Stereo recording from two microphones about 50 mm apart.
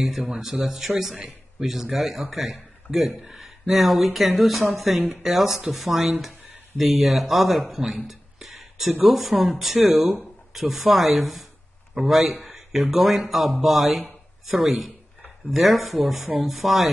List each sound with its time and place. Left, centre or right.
0.0 s a man's voice: centre
8.1 s a sound: centre
9.1 s speech: centre